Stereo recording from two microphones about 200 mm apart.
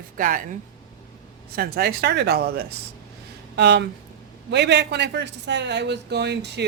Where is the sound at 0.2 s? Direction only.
40° right (ahead or behind).